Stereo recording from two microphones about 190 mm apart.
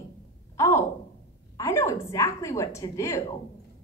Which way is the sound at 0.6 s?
15° left (ahead or behind).